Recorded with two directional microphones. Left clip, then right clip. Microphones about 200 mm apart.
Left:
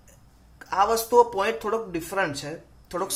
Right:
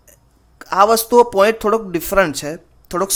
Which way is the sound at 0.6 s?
55° right (ahead or behind).